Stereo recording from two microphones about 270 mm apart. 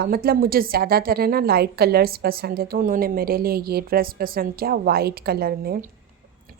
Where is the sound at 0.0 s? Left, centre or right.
Right.